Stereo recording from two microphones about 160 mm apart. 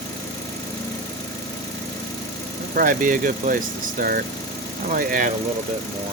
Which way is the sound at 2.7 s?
55° right (ahead or behind).